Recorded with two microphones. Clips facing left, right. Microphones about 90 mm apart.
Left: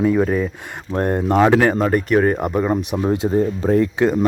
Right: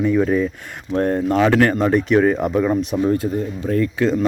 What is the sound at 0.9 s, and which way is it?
Speech, 15° left (ahead or behind).